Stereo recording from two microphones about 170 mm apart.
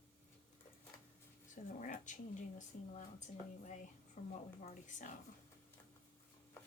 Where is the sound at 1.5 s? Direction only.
50° left (ahead or behind).